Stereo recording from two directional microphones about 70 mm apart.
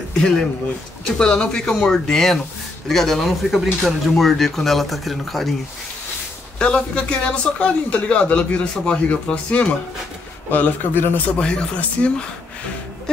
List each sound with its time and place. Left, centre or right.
0.1 s a man's voice: centre
6.6 s a man's voice: centre
11.3 s a man's voice: centre